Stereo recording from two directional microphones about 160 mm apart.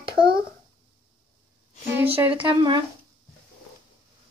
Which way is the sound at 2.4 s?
30° right (ahead or behind).